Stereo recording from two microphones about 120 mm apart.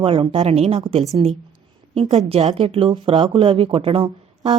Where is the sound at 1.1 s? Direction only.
45° right (ahead or behind).